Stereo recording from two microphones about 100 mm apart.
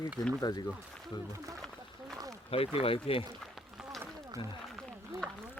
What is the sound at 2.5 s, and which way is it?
Speech, 75° left (ahead or behind).